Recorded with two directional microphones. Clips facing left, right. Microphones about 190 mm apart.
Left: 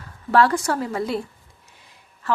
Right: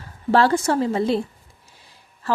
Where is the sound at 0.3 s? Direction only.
30° right (ahead or behind).